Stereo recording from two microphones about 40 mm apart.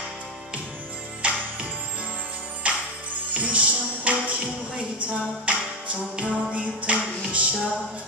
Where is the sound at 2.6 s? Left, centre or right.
Right.